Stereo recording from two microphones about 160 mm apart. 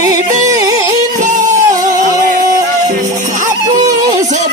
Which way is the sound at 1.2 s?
50° right (ahead or behind).